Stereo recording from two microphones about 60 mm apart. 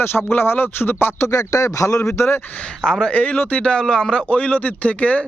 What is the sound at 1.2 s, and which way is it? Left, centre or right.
Speech, left.